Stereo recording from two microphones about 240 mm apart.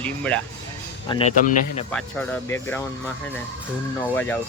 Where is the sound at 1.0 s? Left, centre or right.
Centre.